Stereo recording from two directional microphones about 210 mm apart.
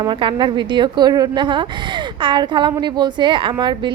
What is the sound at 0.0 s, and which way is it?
A woman's voice, 20° right (ahead or behind).